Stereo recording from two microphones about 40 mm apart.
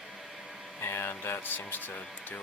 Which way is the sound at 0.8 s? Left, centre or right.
Left.